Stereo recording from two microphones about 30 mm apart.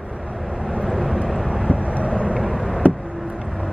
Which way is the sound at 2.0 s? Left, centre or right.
Right.